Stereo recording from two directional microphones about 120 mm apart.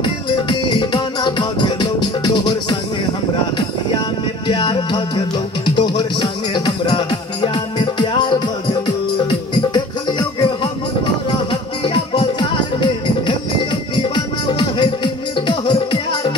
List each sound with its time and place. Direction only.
0.0 s music: 40° left (ahead or behind)
4.5 s music: 40° left (ahead or behind)
11.8 s music: 45° left (ahead or behind)
14.1 s music: 40° left (ahead or behind)